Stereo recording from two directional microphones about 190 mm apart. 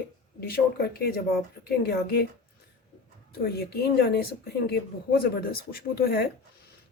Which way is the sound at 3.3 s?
55° left (ahead or behind).